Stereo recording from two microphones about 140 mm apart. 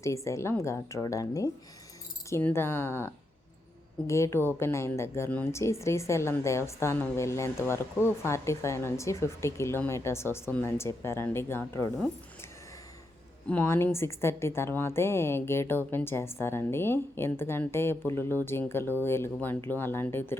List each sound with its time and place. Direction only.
0.0 s a woman's voice: 20° left (ahead or behind)
13.5 s a woman's voice: 15° left (ahead or behind)